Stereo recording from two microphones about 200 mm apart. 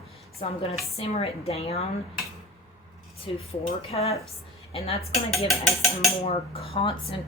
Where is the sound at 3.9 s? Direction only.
30° left (ahead or behind).